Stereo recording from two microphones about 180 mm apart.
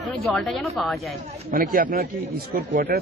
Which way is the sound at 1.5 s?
50° right (ahead or behind).